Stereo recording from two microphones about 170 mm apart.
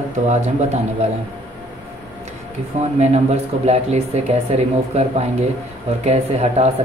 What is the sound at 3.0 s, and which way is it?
Speech, 40° right (ahead or behind).